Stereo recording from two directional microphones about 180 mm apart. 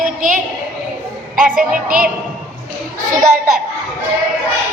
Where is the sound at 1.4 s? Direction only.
50° right (ahead or behind).